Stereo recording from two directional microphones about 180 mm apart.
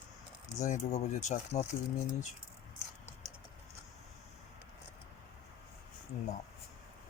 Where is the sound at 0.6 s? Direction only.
40° left (ahead or behind).